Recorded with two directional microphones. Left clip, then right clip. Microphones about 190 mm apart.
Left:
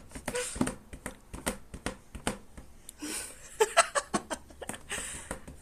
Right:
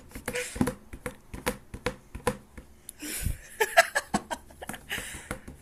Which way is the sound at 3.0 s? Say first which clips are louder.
Right 1 dB; 20° left (ahead or behind).